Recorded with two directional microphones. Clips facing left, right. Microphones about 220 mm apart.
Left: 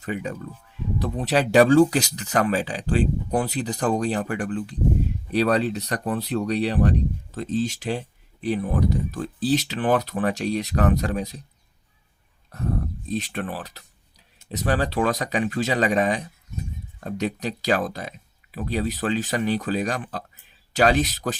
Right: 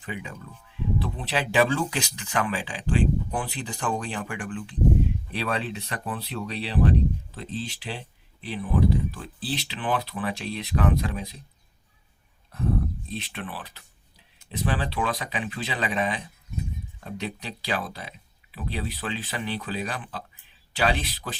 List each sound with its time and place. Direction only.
0.0 s speech: 40° left (ahead or behind)
13.1 s speech: 45° left (ahead or behind)